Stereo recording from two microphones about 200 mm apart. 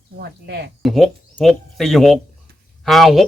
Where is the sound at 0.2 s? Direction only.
60° right (ahead or behind).